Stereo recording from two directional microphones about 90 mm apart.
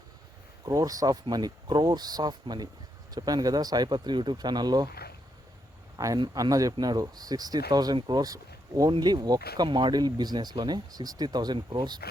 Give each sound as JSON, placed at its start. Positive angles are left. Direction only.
{"t": 0.6, "sound": "speech", "side_deg": -45}
{"t": 6.0, "sound": "speech", "side_deg": -35}
{"t": 8.9, "sound": "speech", "side_deg": -55}